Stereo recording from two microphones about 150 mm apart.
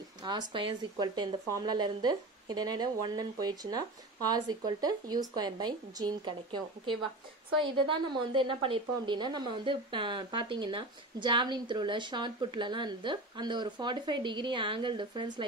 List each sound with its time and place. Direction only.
0.5 s a woman's voice: 35° right (ahead or behind)